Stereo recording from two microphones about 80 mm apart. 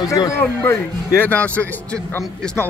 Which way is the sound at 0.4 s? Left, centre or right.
Left.